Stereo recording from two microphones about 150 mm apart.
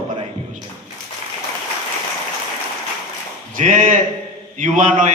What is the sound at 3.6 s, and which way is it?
A man's voice, 60° right (ahead or behind).